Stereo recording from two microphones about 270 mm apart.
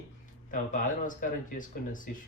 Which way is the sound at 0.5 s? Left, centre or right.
Left.